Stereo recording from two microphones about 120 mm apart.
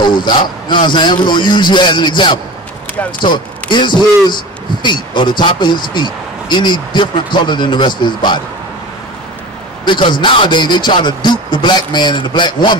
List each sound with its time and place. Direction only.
0.0 s speech: 40° left (ahead or behind)
9.8 s speech: 40° left (ahead or behind)